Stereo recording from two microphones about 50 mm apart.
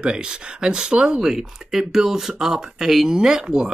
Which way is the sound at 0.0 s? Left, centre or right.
Centre.